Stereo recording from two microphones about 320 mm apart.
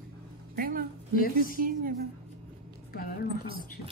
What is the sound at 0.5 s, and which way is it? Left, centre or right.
Music, right.